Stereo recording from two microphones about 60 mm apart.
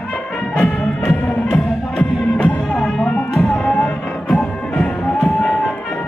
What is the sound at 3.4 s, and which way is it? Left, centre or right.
Music, centre.